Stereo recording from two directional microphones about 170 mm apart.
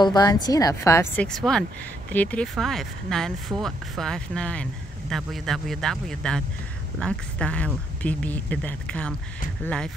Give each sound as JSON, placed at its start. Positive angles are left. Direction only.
{"t": 0.0, "sound": "a woman's voice", "side_deg": 25}
{"t": 1.2, "sound": "speech", "side_deg": 5}